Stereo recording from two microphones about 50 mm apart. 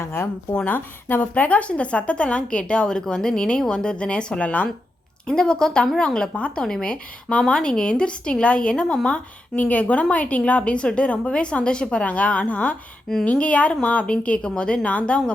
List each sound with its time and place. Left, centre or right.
0.0 s speech: left
0.6 s a woman's voice: left
5.3 s a woman's voice: centre